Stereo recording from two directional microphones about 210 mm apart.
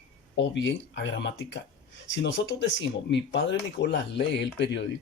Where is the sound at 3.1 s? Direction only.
60° left (ahead or behind).